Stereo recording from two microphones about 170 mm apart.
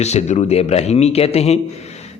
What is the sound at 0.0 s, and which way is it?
A man's voice, 40° left (ahead or behind).